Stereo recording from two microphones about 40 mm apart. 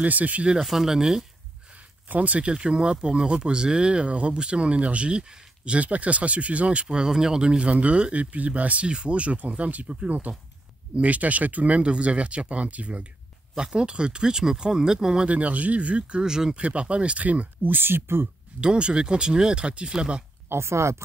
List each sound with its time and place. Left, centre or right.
0.0 s speech: right
0.6 s speech: centre
2.0 s speech: right
2.5 s speech: right
6.9 s speech: centre
7.4 s speech: right
8.8 s speech: right
13.7 s speech: right
15.2 s speech: right; by 16.5 s centre
16.5 s speech: right
17.6 s speech: right
18.6 s speech: right
20.4 s speech: right